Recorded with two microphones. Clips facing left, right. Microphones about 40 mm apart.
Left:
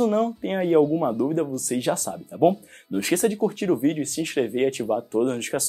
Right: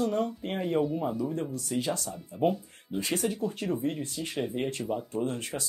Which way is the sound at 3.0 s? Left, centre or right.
Left.